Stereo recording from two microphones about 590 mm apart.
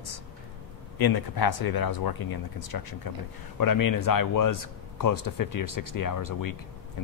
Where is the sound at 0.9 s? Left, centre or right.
Left.